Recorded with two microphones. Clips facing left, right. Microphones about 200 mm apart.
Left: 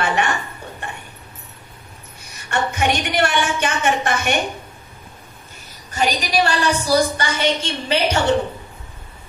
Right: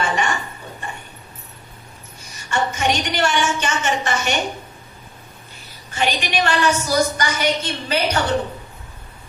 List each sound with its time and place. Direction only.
0.0 s a sound: 60° left (ahead or behind)
2.3 s a woman's voice: 60° left (ahead or behind)
5.9 s a woman's voice: 40° left (ahead or behind); by 8.4 s 25° left (ahead or behind)